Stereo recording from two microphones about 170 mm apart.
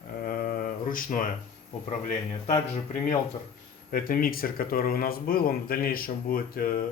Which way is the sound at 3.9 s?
55° left (ahead or behind).